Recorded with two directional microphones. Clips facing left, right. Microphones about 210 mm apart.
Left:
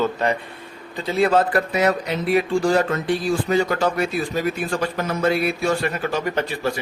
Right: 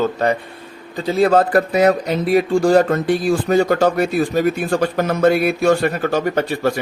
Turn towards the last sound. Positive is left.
turn(degrees=-50)  # may be behind; listen again after turning